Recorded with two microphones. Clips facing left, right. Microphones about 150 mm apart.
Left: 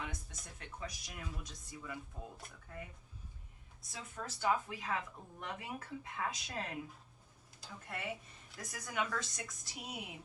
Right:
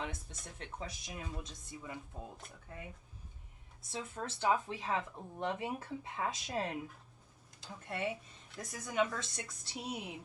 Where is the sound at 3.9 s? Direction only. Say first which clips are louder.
Right 5 dB; 25° right (ahead or behind).